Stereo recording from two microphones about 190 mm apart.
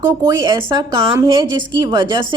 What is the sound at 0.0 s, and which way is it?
A woman's voice, 20° right (ahead or behind).